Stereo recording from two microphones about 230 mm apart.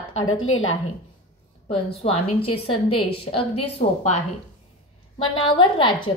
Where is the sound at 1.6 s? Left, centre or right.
Left.